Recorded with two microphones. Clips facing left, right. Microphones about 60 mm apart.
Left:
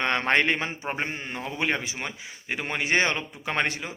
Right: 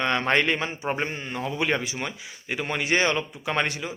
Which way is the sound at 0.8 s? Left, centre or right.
Centre.